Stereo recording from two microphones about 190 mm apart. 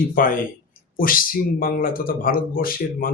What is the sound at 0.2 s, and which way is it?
Speech, 50° left (ahead or behind).